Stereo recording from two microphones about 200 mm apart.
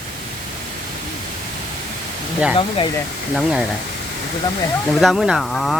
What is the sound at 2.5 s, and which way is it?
Speech, 25° left (ahead or behind).